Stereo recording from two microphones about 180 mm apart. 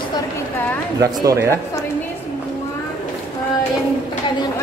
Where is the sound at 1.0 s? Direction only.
20° right (ahead or behind).